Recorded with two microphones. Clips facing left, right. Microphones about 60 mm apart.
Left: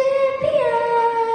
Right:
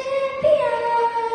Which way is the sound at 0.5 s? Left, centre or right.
Left.